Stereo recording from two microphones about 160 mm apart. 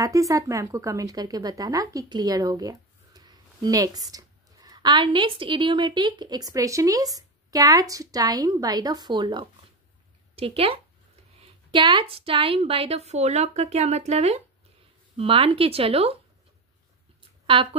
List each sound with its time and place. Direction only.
0.0 s a woman's voice: 20° right (ahead or behind); by 16.2 s 40° right (ahead or behind)